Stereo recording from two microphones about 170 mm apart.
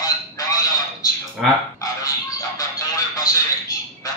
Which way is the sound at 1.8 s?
20° left (ahead or behind).